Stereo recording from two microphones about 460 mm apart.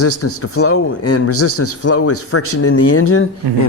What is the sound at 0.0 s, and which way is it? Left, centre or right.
Speech, left.